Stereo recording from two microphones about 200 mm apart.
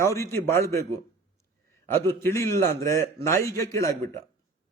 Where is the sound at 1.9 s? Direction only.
10° left (ahead or behind).